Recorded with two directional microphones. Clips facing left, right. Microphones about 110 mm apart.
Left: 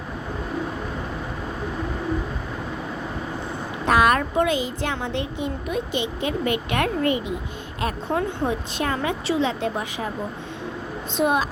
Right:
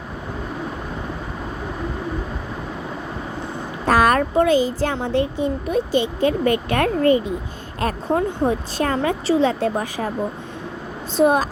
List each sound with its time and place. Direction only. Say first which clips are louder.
3.8 s speech: right 2 dB; 40° right (ahead or behind)
11.2 s speech: right 5 dB; 35° right (ahead or behind)